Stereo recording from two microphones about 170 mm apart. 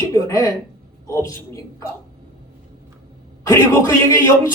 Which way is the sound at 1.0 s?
20° left (ahead or behind).